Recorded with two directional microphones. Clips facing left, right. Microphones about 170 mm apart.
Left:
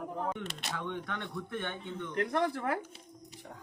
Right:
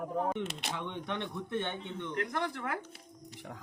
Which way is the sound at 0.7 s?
20° right (ahead or behind).